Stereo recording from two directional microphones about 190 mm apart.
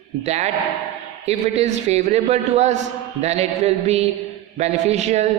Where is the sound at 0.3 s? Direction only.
35° right (ahead or behind).